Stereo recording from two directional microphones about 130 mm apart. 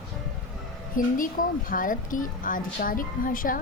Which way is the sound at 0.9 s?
90° left.